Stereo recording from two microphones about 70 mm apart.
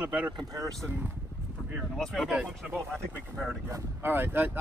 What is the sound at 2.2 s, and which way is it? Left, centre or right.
Speech, centre.